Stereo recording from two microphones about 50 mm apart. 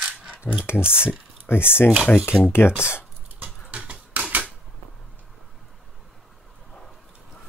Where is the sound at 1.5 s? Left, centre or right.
Left.